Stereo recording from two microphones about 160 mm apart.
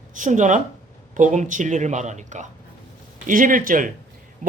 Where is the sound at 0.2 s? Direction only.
50° right (ahead or behind).